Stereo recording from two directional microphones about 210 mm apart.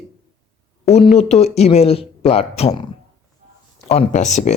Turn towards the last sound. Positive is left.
turn(degrees=30)  # may be behind; listen again after turning